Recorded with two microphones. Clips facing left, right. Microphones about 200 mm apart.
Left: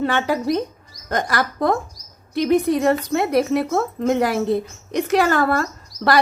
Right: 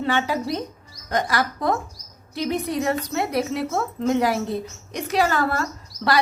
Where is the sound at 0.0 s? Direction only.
55° left (ahead or behind).